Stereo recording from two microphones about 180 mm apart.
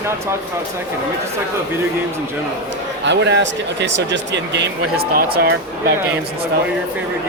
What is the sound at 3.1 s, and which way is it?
Speech, 75° right (ahead or behind).